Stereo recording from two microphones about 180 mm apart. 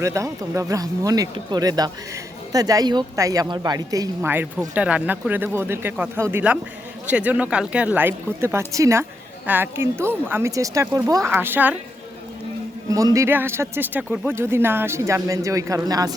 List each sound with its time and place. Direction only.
0.0 s a woman's voice: 15° right (ahead or behind)
12.9 s a woman's voice: 20° right (ahead or behind)